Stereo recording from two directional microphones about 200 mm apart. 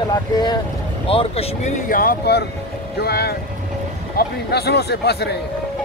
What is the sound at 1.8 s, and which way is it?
Speech, 45° left (ahead or behind).